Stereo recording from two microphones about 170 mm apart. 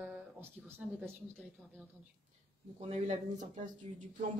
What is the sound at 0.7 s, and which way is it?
Speech, 10° right (ahead or behind).